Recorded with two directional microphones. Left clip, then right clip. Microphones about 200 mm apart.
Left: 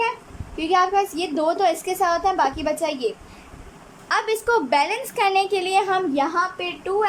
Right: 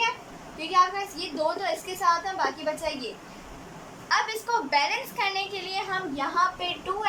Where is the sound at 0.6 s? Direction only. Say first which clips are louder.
Left 5 dB; 65° left (ahead or behind).